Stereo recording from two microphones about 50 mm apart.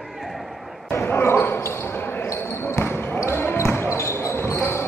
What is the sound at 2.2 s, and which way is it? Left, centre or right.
Basketball bounce, left.